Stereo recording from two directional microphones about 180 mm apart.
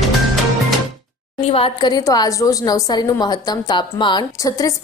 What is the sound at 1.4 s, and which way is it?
A woman's voice, 30° left (ahead or behind).